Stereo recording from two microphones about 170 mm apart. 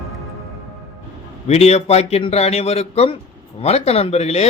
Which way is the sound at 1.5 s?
40° left (ahead or behind).